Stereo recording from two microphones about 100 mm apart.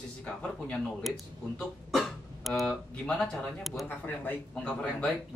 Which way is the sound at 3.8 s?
20° left (ahead or behind).